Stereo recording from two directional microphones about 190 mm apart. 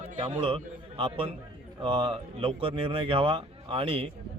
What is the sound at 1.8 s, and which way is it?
A man's voice, 25° right (ahead or behind).